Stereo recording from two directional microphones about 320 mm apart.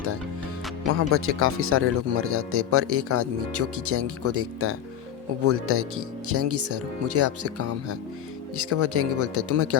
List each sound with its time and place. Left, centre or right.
0.9 s speech: right